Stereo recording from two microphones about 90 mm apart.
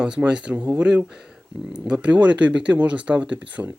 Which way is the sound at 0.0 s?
10° right (ahead or behind).